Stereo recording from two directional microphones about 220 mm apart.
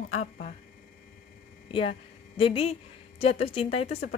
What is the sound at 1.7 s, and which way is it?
A woman's voice, 25° left (ahead or behind).